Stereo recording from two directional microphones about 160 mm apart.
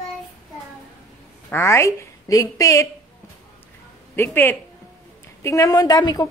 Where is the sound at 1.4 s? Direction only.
15° left (ahead or behind).